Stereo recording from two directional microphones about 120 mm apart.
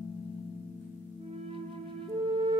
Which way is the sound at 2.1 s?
45° right (ahead or behind).